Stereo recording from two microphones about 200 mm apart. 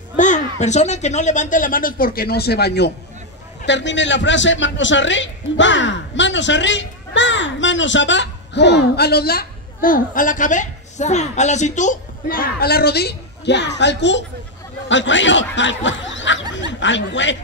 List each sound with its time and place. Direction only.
0.2 s a man's voice: 35° left (ahead or behind); by 17.4 s 65° left (ahead or behind)